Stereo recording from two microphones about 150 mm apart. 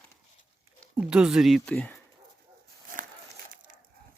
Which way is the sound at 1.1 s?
5° right (ahead or behind).